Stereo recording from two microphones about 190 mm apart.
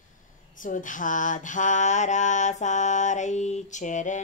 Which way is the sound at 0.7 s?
45° left (ahead or behind).